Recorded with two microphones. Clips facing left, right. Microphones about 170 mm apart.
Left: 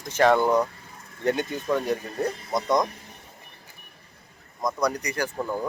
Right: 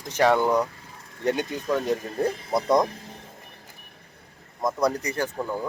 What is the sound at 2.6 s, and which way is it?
Speech, 30° right (ahead or behind).